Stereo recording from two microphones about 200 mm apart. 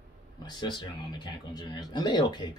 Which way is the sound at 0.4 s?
20° left (ahead or behind).